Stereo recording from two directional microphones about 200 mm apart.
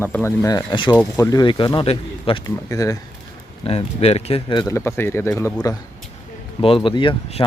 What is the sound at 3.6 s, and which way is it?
Speech, 30° left (ahead or behind).